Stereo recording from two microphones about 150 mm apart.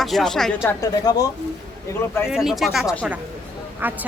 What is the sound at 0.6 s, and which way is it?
Speech, 25° left (ahead or behind).